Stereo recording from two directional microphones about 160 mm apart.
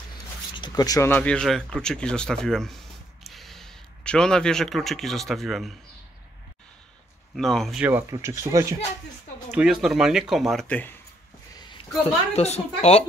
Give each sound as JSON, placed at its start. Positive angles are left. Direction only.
{"t": 0.6, "sound": "speech", "side_deg": 25}
{"t": 7.3, "sound": "speech", "side_deg": 0}
{"t": 7.8, "sound": "speech", "side_deg": -15}
{"t": 9.5, "sound": "speech", "side_deg": -5}
{"t": 11.5, "sound": "a sound", "side_deg": 25}
{"t": 12.4, "sound": "speech", "side_deg": 40}